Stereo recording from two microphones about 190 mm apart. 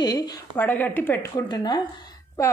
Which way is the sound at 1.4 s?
20° left (ahead or behind).